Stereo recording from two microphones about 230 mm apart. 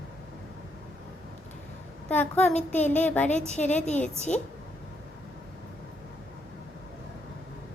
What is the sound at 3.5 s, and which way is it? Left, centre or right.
Speech, left.